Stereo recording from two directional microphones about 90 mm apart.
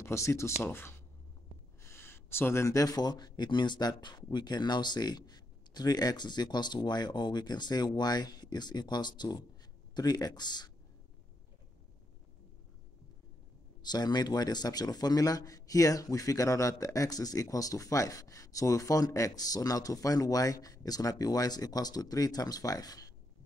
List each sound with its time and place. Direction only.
0.0 s a man's voice: 30° left (ahead or behind); by 10.7 s 55° left (ahead or behind)
13.8 s a man's voice: 50° left (ahead or behind)